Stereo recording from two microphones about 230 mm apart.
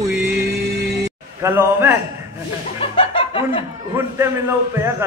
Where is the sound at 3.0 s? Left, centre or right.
Left.